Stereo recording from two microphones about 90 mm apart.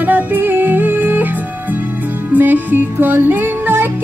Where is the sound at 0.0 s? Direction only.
20° right (ahead or behind).